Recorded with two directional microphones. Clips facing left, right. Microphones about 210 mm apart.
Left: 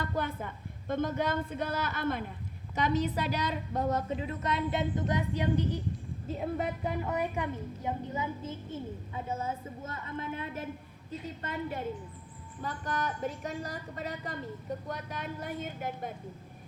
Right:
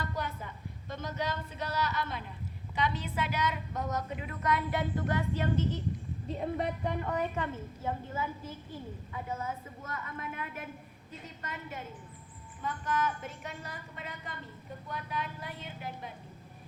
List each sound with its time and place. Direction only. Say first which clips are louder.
0.0 s a woman's voice: left 4 dB; 55° left (ahead or behind); by 5.8 s 15° left (ahead or behind)
6.2 s a woman's voice: even; 5° left (ahead or behind); by 10.7 s 30° left (ahead or behind)
12.6 s a woman's voice: right 2 dB; 35° left (ahead or behind)